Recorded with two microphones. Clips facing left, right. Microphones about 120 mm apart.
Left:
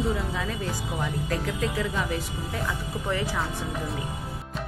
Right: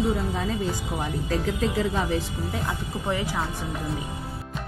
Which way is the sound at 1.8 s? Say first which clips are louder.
Right 3 dB; 30° right (ahead or behind).